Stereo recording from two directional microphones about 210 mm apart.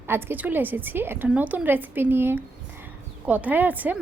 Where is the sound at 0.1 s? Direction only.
10° right (ahead or behind).